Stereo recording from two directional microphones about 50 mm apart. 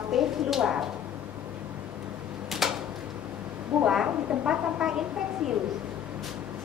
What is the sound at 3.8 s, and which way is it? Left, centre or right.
Speech, centre.